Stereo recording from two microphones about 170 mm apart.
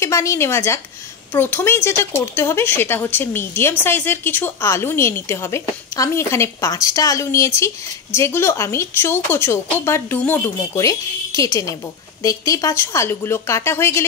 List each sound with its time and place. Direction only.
0.0 s speech: 15° left (ahead or behind)